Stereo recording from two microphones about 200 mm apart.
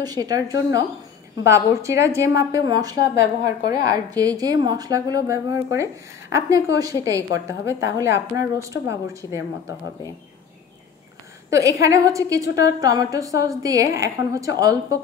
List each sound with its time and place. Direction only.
0.0 s a woman's voice: 20° right (ahead or behind)
11.5 s a woman's voice: 15° right (ahead or behind)